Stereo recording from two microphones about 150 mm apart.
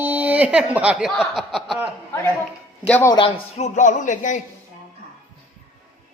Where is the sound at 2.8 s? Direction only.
10° left (ahead or behind).